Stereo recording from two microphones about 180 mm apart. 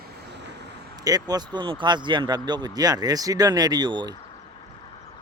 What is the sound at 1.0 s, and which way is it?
Speech, 20° right (ahead or behind).